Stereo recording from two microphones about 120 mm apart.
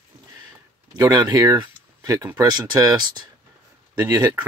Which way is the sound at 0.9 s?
35° right (ahead or behind).